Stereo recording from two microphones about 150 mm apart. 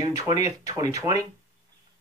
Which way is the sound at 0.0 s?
25° right (ahead or behind).